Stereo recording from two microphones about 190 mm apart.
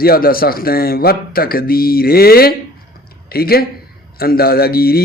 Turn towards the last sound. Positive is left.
turn(degrees=55)  # may be behind; listen again after turning